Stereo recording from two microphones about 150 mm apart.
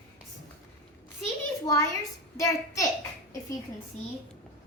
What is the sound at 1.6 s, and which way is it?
A child's voice, 25° left (ahead or behind).